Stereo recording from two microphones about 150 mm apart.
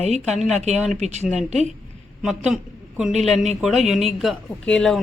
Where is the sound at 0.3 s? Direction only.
Centre (ahead or behind).